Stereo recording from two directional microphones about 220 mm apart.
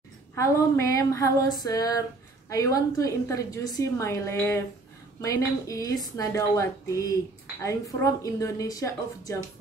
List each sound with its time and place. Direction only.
0.4 s a woman's voice: 15° left (ahead or behind)